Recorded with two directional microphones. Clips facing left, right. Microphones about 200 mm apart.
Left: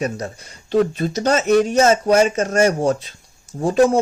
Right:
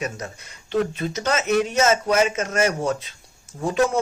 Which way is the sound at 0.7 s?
35° left (ahead or behind).